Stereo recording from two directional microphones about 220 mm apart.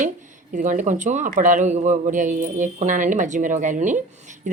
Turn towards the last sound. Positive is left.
turn(degrees=-35)  # may be behind; listen again after turning